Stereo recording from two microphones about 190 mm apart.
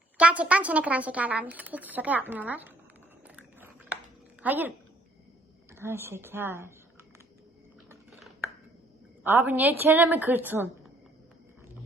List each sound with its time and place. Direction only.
0.2 s speech: 5° right (ahead or behind)
3.2 s biting: 5° right (ahead or behind)
4.4 s speech: 10° right (ahead or behind)
5.7 s speech: 15° right (ahead or behind)
9.2 s speech: 10° right (ahead or behind)